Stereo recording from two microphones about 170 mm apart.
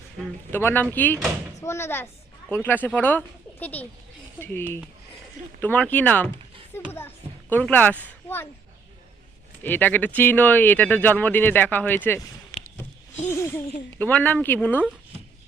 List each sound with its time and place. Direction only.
0.5 s speech: 10° left (ahead or behind)
6.7 s a sound: 15° left (ahead or behind)
7.5 s speech: 10° left (ahead or behind)
9.6 s speech: 10° left (ahead or behind)
14.0 s speech: 10° left (ahead or behind)